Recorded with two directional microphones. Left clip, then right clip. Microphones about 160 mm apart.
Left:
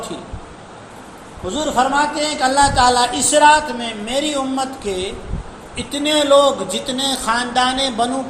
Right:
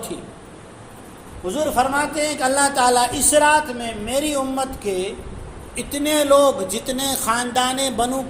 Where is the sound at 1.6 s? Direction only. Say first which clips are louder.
Left 3 dB; 45° right (ahead or behind).